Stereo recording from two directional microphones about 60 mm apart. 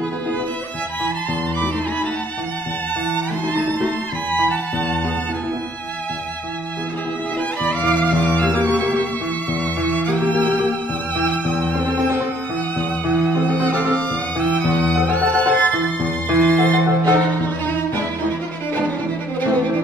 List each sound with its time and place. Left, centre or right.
4.3 s music: left
7.6 s music: left
14.5 s music: left
16.3 s music: right